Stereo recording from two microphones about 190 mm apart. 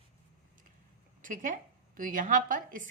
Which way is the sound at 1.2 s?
45° right (ahead or behind).